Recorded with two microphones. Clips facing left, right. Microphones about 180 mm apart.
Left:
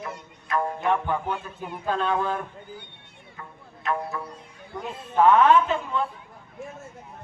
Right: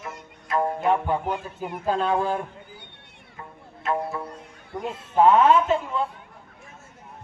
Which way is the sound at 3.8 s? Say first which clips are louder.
Right 2 dB; 30° right (ahead or behind).